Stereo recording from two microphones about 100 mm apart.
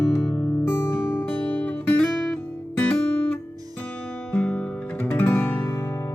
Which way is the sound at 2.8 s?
15° left (ahead or behind).